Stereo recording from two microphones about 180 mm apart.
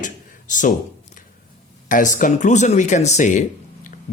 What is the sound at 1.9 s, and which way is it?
Speech, 45° left (ahead or behind).